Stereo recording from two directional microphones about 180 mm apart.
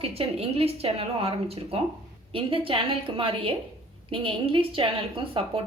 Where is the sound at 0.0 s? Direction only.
35° right (ahead or behind).